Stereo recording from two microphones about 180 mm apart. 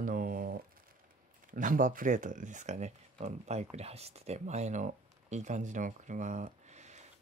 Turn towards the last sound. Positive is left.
turn(degrees=-40)  # may be behind; listen again after turning